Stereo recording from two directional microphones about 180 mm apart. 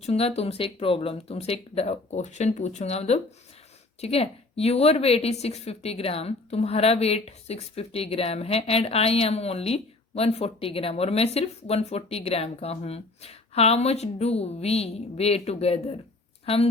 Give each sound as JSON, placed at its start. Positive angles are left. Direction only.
{"t": 0.0, "sound": "a woman's voice", "side_deg": 35}